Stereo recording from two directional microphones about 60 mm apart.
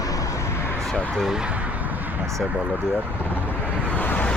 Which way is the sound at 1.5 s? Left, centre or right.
Right.